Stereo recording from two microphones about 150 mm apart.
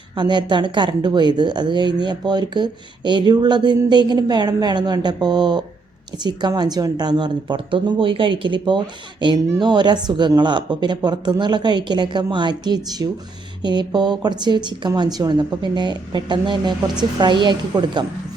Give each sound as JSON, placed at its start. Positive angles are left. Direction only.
{"t": 0.2, "sound": "a woman's voice", "side_deg": -30}